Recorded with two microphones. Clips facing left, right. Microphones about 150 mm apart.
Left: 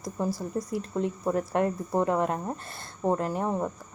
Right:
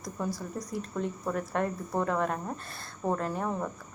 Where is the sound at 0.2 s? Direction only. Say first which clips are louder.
Left 5 dB; 30° left (ahead or behind).